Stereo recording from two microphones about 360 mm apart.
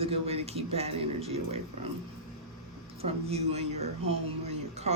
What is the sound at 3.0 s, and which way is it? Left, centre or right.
Speech, centre.